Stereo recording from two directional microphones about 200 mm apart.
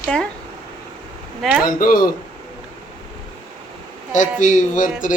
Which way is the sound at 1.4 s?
5° right (ahead or behind).